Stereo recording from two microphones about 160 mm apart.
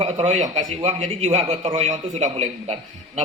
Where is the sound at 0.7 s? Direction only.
40° right (ahead or behind).